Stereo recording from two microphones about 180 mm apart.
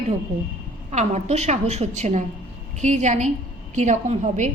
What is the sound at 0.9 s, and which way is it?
Speech, 40° right (ahead or behind).